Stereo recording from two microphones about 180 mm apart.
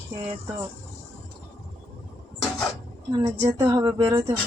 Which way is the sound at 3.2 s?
20° right (ahead or behind).